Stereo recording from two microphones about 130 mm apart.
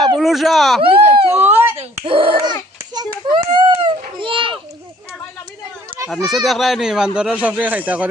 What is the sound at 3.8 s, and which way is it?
Children playing, 40° right (ahead or behind).